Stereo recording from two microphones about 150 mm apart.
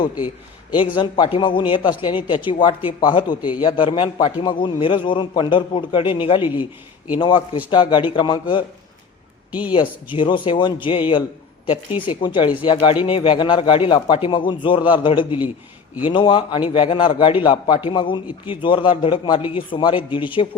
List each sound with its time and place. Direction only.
0.9 s speech: 30° left (ahead or behind)
6.4 s a man's voice: 15° right (ahead or behind)
7.2 s speech: 35° left (ahead or behind)
9.5 s speech: 10° right (ahead or behind)
10.1 s speech: 35° left (ahead or behind)